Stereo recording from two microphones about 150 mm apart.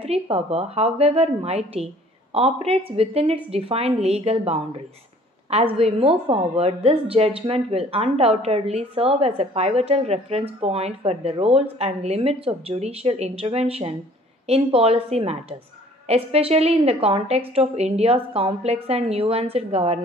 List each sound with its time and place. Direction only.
0.0 s a woman's voice: 40° right (ahead or behind)